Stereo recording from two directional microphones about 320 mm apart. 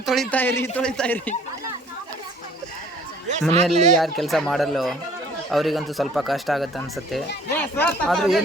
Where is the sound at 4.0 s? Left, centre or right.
Centre.